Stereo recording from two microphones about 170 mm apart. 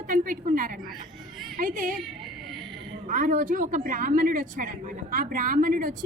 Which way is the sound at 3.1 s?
50° right (ahead or behind).